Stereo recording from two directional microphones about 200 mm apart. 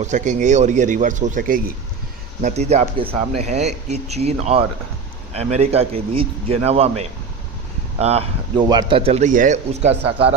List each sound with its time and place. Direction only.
0.0 s speech: 35° right (ahead or behind)
7.9 s speech: 30° right (ahead or behind)